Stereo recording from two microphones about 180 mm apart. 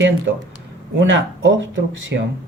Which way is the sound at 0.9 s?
90° right.